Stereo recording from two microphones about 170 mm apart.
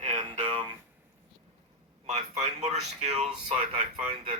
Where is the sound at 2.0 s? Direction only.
40° right (ahead or behind).